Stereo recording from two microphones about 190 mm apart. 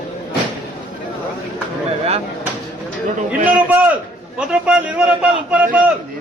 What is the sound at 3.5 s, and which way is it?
A man's voice, 10° right (ahead or behind).